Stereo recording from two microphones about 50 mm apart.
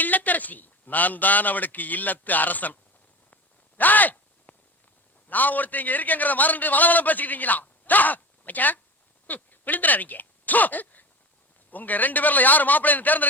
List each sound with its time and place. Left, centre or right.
0.0 s a man's voice: left
3.8 s a sound: left
5.3 s a man's voice: left